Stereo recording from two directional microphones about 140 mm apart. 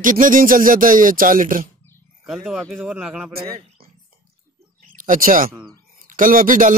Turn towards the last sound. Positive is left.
turn(degrees=-75)  # may be behind; listen again after turning